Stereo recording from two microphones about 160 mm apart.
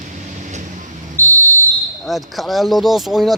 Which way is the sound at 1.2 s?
15° left (ahead or behind).